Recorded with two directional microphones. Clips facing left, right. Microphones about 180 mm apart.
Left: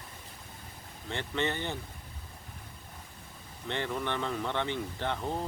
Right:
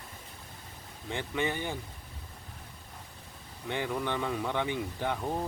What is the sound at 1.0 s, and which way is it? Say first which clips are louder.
Speech: even; 10° right (ahead or behind).